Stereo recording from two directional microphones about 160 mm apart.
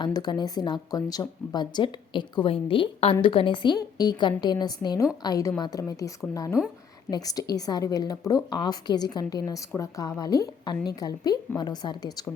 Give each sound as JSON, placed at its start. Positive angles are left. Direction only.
{"t": 0.0, "sound": "speech", "side_deg": 25}